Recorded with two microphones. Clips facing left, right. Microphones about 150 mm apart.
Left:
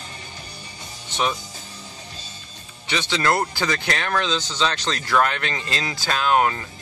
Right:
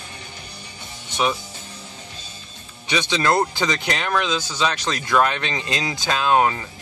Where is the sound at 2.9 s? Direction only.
15° right (ahead or behind).